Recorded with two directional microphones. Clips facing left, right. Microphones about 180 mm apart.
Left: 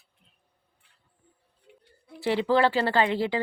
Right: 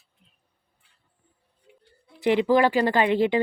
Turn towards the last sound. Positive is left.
turn(degrees=-20)  # may be behind; listen again after turning